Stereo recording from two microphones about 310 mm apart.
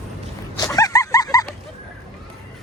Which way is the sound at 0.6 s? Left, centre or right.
Centre.